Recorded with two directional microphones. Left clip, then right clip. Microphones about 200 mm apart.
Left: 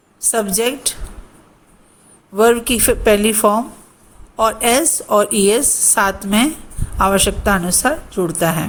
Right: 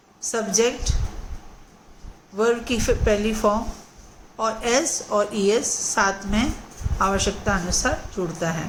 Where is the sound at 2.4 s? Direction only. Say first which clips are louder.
Left 8 dB; 50° left (ahead or behind).